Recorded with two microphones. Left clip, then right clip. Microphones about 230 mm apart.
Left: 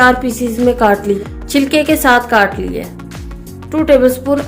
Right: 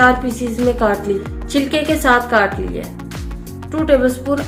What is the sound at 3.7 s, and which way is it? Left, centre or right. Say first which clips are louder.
Speech: left 5 dB; left.